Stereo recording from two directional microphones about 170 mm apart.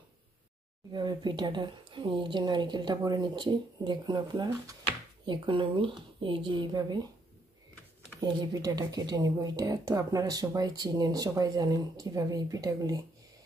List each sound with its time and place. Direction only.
0.9 s speech: 25° right (ahead or behind)
8.2 s speech: 25° right (ahead or behind)